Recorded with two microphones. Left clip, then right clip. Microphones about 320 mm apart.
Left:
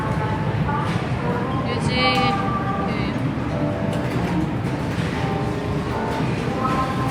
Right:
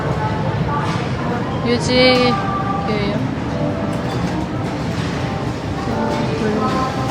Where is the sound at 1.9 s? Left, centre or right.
Centre.